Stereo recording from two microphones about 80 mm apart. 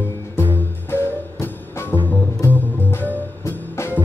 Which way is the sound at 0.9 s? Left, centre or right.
Left.